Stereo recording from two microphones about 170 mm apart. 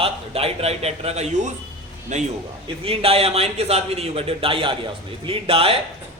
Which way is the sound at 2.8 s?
35° right (ahead or behind).